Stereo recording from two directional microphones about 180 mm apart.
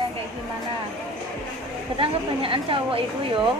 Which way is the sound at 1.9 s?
30° right (ahead or behind).